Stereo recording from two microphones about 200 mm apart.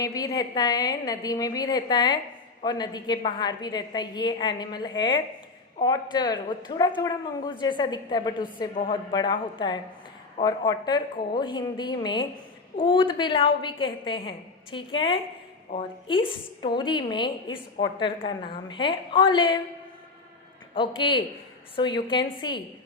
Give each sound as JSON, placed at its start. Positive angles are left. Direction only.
{"t": 0.0, "sound": "a woman's voice", "side_deg": 20}
{"t": 20.7, "sound": "a woman's voice", "side_deg": 25}